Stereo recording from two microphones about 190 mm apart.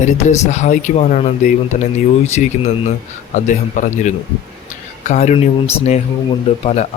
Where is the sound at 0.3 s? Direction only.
40° left (ahead or behind).